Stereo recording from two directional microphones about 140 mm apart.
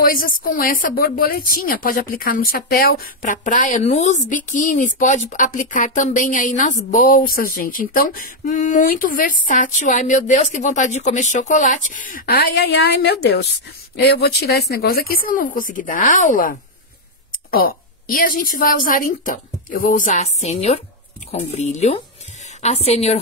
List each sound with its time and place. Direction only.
0.0 s a woman's voice: 85° left
14.2 s a woman's voice: 90° left
17.5 s a woman's voice: 90° left; by 23.1 s 50° left (ahead or behind)